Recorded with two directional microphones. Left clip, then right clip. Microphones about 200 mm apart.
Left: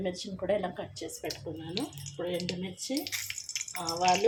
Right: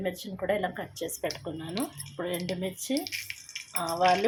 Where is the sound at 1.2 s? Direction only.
25° right (ahead or behind).